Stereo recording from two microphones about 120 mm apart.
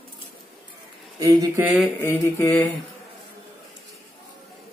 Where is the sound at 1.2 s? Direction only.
30° right (ahead or behind).